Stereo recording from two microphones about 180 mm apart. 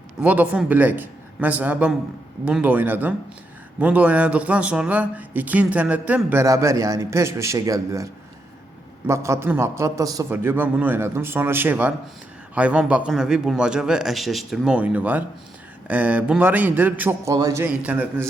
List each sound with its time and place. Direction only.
0.2 s a man's voice: 5° right (ahead or behind)